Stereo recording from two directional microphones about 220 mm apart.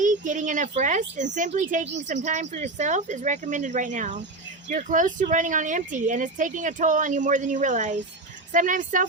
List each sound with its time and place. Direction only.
0.0 s speech: 35° right (ahead or behind)